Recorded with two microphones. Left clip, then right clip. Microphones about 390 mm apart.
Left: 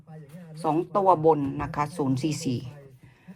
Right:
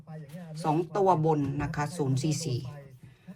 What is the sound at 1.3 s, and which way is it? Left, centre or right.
Speech, centre.